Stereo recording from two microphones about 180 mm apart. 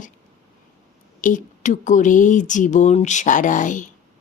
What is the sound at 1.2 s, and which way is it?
Speech, 45° left (ahead or behind).